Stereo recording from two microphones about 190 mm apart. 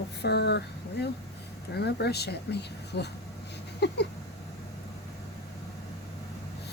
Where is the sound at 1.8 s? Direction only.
60° left (ahead or behind).